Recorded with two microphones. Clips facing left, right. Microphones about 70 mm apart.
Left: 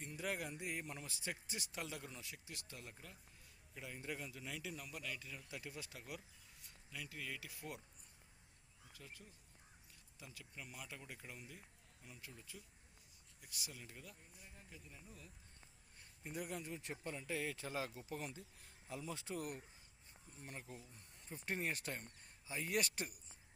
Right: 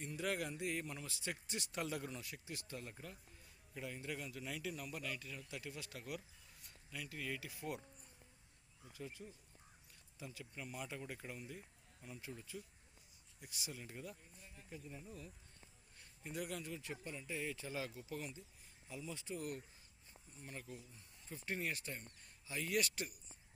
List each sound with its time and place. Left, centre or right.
0.0 s speech: centre
1.8 s speech: centre
5.5 s speech: left
5.9 s speech: centre
8.9 s speech: centre
16.5 s speech: left
16.8 s speech: left
18.9 s speech: left
20.7 s speech: left
22.4 s speech: left
22.7 s speech: left